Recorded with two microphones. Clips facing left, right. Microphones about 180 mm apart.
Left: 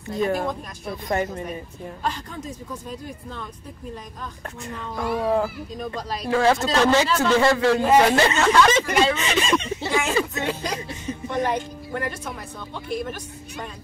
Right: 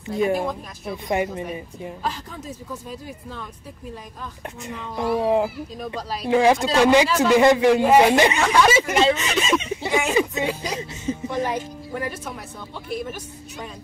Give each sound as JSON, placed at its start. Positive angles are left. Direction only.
{"t": 0.1, "sound": "speech", "side_deg": -5}
{"t": 4.6, "sound": "music", "side_deg": -20}
{"t": 5.1, "sound": "speech", "side_deg": -20}
{"t": 5.9, "sound": "speech", "side_deg": -5}
{"t": 6.2, "sound": "speech", "side_deg": -15}
{"t": 10.8, "sound": "music", "side_deg": -25}
{"t": 11.2, "sound": "speech", "side_deg": -5}